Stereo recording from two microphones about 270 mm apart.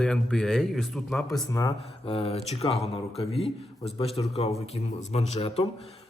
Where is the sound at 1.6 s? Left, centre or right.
Left.